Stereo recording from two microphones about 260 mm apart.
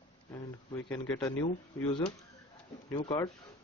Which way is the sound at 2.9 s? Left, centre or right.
Centre.